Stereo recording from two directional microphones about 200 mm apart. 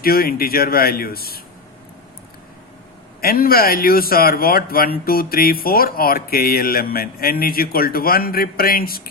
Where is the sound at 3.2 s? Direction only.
45° left (ahead or behind).